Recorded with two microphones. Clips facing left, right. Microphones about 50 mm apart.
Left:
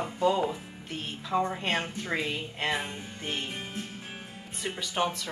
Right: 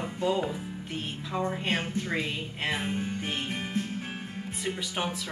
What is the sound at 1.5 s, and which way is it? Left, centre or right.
Speech, centre.